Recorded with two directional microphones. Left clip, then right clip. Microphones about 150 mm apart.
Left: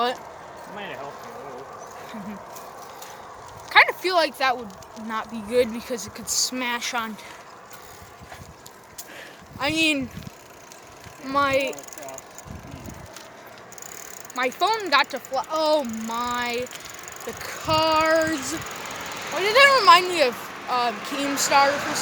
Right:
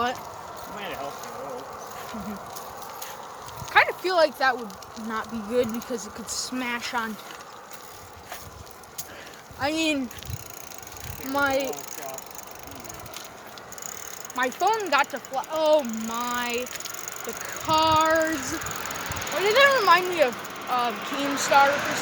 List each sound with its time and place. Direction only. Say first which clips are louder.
0.8 s a sound: right 1 dB; 25° left (ahead or behind)
3.7 s a sound: left 4 dB; 35° left (ahead or behind)
4.1 s speech: even; 25° left (ahead or behind); by 6.9 s 40° left (ahead or behind)
9.6 s speech: left 3 dB; 30° left (ahead or behind)
11.3 s speech: left 3 dB; 20° left (ahead or behind)
14.3 s speech: left 1 dB; 40° left (ahead or behind)
15.4 s speech: even; 65° left (ahead or behind)
17.3 s speech: even; 15° left (ahead or behind)
18.0 s a sound: left 1 dB; 35° left (ahead or behind)
19.5 s speech: left 3 dB; 50° left (ahead or behind)
19.7 s speech: left 4 dB; 35° left (ahead or behind); by 20.9 s 55° left (ahead or behind)
20.9 s speech: left 1 dB; 20° left (ahead or behind)